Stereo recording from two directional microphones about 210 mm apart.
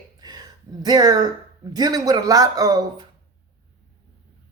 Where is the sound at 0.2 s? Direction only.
20° right (ahead or behind).